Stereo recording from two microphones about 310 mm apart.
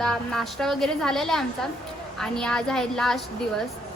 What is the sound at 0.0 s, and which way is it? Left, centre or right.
A woman's voice, centre.